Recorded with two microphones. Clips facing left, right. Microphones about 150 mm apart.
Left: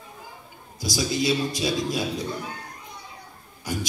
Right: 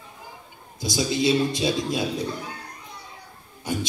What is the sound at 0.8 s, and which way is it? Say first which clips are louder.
A man's voice: right 1 dB; 25° right (ahead or behind).